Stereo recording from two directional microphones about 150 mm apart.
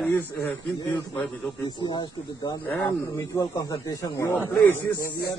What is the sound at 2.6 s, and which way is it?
Speech, 15° left (ahead or behind).